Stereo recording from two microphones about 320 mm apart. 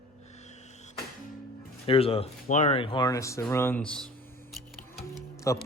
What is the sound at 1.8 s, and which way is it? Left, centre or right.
Speech, centre.